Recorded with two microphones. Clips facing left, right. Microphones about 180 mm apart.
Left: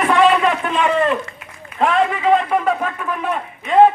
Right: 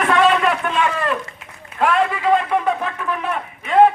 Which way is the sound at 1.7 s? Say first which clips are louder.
Left 1 dB; 25° right (ahead or behind).